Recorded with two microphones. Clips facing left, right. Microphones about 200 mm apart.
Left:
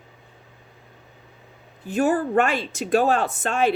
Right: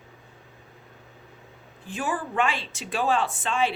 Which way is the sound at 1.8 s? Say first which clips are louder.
Left 9 dB; 40° left (ahead or behind).